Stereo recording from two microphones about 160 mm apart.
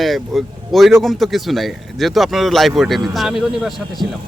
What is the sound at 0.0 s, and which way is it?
A man's voice, centre (ahead or behind).